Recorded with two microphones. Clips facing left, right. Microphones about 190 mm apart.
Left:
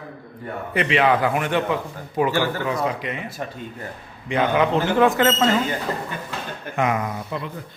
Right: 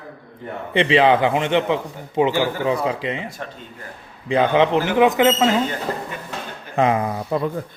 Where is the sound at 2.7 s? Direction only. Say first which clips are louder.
Right 3 dB; 30° right (ahead or behind).